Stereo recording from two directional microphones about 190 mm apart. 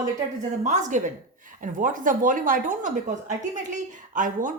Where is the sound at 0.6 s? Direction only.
40° right (ahead or behind).